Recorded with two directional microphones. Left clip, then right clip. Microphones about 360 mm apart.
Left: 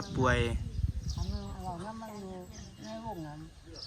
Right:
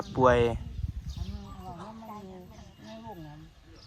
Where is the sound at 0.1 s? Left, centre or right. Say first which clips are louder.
Right 8 dB; centre.